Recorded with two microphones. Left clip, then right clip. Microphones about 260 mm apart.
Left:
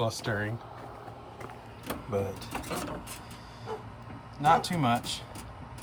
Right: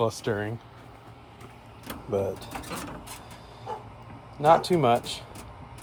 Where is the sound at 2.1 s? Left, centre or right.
Right.